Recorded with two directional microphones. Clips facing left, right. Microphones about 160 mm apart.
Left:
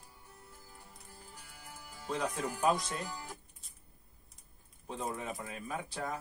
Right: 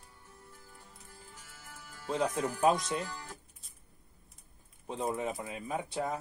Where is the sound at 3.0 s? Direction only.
15° left (ahead or behind).